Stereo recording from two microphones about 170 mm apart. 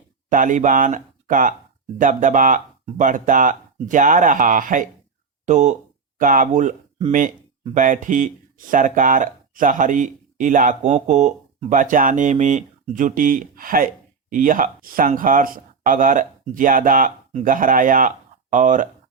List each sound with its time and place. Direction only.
0.3 s speech: 50° right (ahead or behind)